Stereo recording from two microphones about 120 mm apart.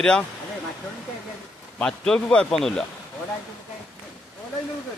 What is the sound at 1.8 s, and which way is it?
Speech, 5° left (ahead or behind).